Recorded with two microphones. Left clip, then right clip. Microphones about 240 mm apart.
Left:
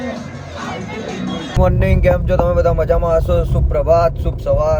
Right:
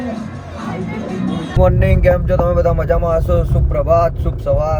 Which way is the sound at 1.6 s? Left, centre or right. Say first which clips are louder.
Right 2 dB; centre.